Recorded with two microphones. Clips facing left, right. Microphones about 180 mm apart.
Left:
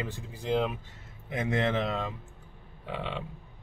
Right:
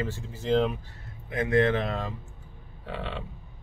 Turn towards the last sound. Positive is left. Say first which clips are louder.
# even
turn(degrees=15)  # may be behind; listen again after turning